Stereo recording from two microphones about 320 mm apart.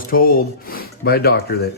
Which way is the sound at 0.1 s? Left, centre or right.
Left.